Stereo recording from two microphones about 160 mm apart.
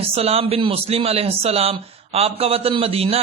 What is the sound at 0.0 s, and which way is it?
A man's voice, 40° right (ahead or behind).